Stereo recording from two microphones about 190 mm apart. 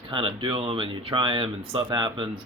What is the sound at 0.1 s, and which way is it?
Speech, 25° right (ahead or behind).